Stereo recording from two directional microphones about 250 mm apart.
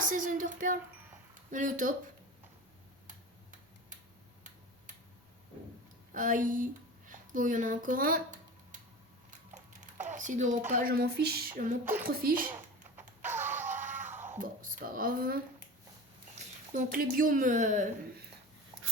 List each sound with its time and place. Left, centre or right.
0.0 s a woman's voice: right
6.1 s a woman's voice: right
7.1 s a sound: right
9.8 s typing: right
10.7 s a woman's voice: right
13.0 s music: centre
14.3 s speech: right
16.7 s a woman's voice: right